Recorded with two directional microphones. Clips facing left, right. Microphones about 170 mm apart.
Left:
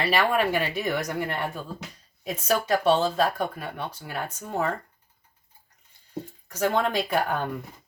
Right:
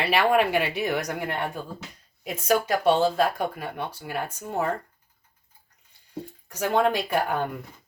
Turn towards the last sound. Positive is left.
turn(degrees=-10)  # may be behind; listen again after turning